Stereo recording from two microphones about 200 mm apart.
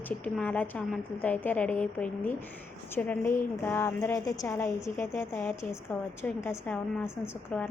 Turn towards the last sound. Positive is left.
turn(degrees=10)  # may be behind; listen again after turning